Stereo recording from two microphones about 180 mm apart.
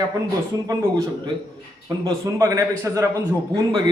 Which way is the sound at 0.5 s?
20° right (ahead or behind).